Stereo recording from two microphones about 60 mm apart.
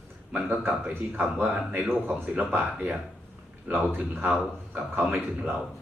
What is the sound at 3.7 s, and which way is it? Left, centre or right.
A man's voice, right.